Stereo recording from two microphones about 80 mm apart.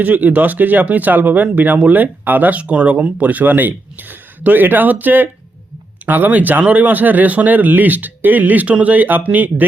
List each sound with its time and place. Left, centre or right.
0.0 s speech: right